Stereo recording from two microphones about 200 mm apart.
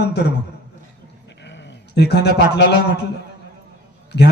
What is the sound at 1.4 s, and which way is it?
A man's voice, 60° left (ahead or behind).